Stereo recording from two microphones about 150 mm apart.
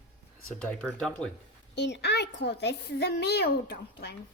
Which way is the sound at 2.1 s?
90° left.